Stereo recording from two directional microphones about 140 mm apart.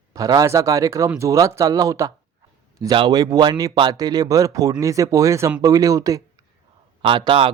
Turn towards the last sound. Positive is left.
turn(degrees=-40)  # may be behind; listen again after turning